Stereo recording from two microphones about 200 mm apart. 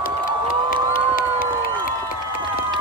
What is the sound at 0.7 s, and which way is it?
Cheering, 45° left (ahead or behind).